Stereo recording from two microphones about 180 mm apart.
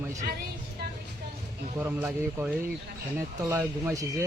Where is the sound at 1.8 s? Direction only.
10° right (ahead or behind).